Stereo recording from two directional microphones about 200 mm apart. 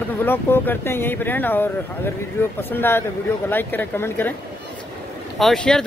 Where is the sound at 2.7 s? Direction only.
10° left (ahead or behind).